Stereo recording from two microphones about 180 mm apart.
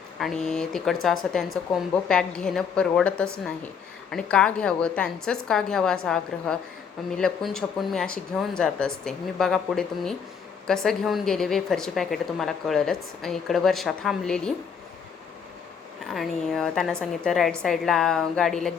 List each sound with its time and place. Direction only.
0.2 s a woman's voice: centre (ahead or behind)
16.0 s a woman's voice: centre (ahead or behind)